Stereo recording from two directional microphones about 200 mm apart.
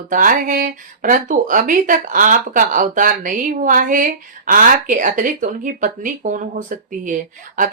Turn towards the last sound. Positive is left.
turn(degrees=-40)  # may be behind; listen again after turning